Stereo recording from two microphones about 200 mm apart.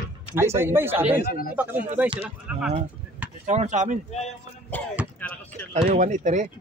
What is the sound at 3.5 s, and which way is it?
Speech, 35° right (ahead or behind).